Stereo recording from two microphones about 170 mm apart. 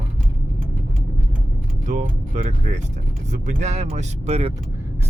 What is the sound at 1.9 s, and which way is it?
Speech, 45° right (ahead or behind).